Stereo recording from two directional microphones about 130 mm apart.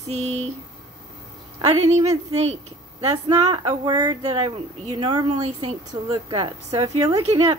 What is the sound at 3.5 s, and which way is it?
Speech, 35° right (ahead or behind).